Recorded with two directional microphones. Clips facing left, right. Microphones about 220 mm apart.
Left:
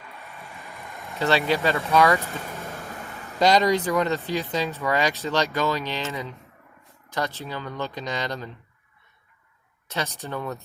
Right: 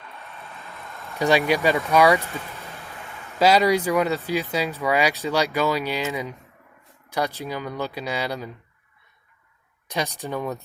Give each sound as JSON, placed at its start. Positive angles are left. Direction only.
{"t": 0.3, "sound": "a sound", "side_deg": 15}
{"t": 1.2, "sound": "speech", "side_deg": -15}
{"t": 2.6, "sound": "vehicle", "side_deg": 45}
{"t": 3.3, "sound": "speech", "side_deg": -5}
{"t": 9.9, "sound": "speech", "side_deg": -15}